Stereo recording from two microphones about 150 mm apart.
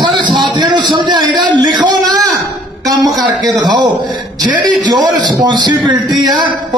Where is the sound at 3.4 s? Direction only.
25° right (ahead or behind).